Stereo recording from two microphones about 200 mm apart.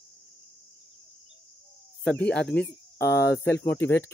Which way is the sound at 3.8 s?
10° left (ahead or behind).